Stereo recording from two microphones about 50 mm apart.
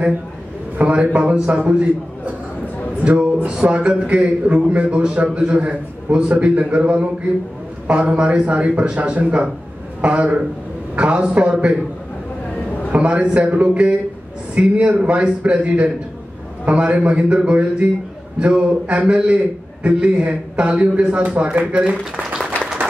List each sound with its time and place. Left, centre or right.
0.7 s a man's voice: right
3.0 s a man's voice: right
12.9 s a man's voice: right